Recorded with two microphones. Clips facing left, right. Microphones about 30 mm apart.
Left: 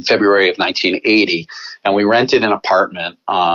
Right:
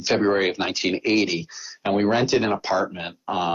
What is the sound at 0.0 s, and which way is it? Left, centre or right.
Speech, left.